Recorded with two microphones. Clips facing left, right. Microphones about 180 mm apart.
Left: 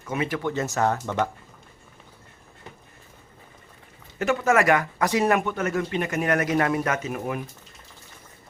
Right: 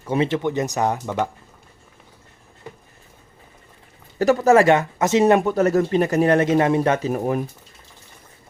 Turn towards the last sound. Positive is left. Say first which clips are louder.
# right 7 dB
turn(degrees=-40)  # may be behind; listen again after turning